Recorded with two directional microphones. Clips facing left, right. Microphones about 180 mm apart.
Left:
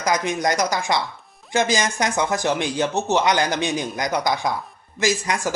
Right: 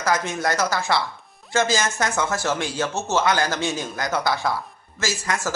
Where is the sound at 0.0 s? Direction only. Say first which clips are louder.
Left 2 dB; 15° left (ahead or behind).